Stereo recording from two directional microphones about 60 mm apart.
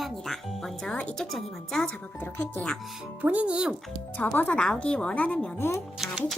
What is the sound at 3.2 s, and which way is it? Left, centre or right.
Speech, right.